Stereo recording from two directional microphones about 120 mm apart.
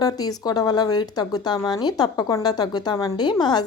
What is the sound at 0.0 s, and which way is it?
A woman's voice, 30° left (ahead or behind).